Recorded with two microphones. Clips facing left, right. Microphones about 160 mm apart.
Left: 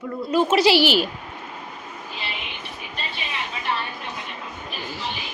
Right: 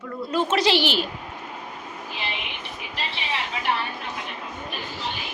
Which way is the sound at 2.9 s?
90° right.